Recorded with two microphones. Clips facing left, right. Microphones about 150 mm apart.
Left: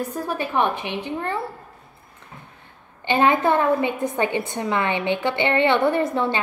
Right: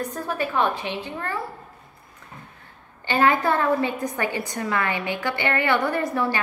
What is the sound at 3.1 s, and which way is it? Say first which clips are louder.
A woman's voice: left 2 dB; 20° left (ahead or behind).